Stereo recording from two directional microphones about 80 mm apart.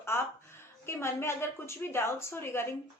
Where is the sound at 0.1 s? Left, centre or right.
Left.